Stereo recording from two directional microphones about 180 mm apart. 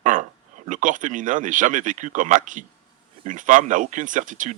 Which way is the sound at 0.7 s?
45° right (ahead or behind).